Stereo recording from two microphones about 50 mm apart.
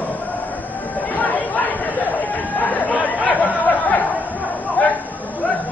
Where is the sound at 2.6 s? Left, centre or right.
Left.